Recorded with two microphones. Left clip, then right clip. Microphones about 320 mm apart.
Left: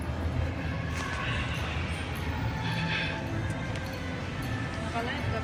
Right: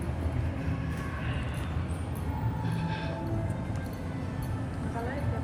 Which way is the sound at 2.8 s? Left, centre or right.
Centre.